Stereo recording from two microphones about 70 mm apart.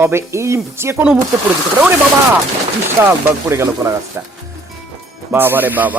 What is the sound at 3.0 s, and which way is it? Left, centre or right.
Speech, right.